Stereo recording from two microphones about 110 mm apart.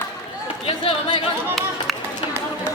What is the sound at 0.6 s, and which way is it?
Speech, 55° left (ahead or behind).